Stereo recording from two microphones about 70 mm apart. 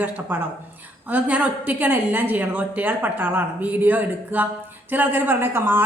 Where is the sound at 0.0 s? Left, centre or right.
Right.